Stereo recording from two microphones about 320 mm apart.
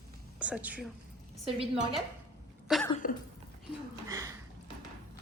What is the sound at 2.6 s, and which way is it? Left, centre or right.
Cough, centre.